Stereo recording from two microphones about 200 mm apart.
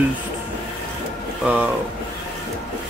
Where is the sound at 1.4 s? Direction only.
5° right (ahead or behind).